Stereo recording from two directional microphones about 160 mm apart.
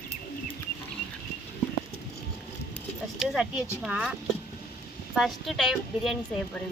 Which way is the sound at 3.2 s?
Centre (ahead or behind).